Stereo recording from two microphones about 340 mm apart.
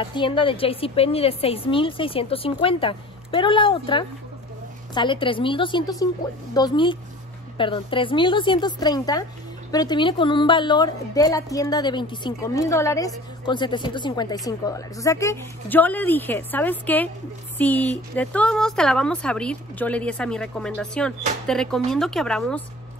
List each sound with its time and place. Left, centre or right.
0.0 s a woman's voice: centre